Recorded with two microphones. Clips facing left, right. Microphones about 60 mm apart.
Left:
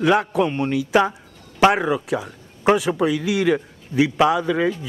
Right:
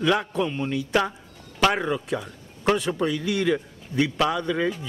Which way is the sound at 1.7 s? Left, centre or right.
Centre.